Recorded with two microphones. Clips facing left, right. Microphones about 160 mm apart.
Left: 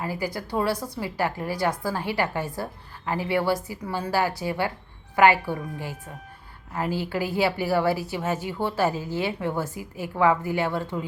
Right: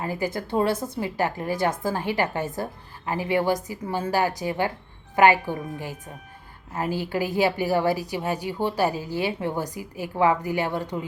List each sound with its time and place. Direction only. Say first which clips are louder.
0.0 s a woman's voice: right 2 dB; 20° right (ahead or behind)